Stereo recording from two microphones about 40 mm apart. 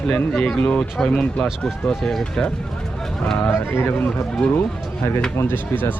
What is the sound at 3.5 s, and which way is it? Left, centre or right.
Speech, left.